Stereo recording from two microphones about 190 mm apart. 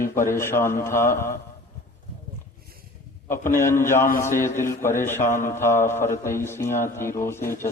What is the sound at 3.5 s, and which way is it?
A man's voice, 15° left (ahead or behind).